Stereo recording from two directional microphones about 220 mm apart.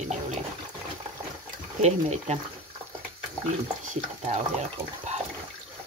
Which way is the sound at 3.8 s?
30° right (ahead or behind).